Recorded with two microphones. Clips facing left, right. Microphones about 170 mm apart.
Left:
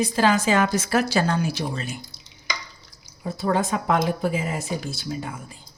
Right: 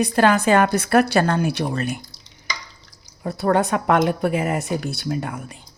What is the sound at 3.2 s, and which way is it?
A woman's voice, 60° right (ahead or behind).